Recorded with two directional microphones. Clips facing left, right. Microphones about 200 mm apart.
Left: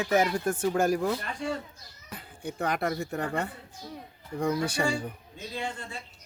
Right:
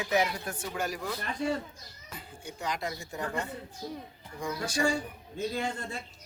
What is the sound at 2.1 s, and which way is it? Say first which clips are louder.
Speech: left 7 dB; 60° left (ahead or behind).